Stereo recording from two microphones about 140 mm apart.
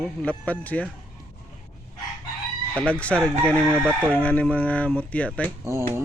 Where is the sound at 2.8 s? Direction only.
10° left (ahead or behind).